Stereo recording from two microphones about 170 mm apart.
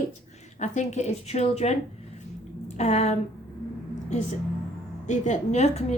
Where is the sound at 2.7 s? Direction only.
40° left (ahead or behind).